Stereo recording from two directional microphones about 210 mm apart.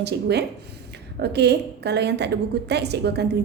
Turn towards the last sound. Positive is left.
turn(degrees=-50)  # may be behind; listen again after turning